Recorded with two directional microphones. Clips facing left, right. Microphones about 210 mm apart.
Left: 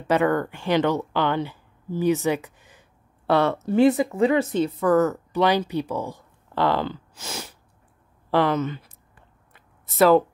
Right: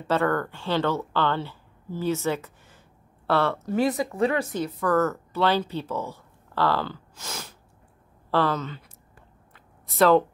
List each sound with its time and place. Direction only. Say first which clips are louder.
0.0 s speech: left 3 dB; 15° left (ahead or behind)
9.9 s speech: left 2 dB; 5° left (ahead or behind)